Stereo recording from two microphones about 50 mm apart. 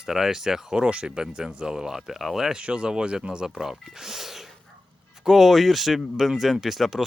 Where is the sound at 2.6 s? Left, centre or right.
Centre.